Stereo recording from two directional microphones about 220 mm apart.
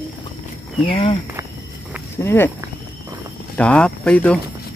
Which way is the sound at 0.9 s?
25° left (ahead or behind).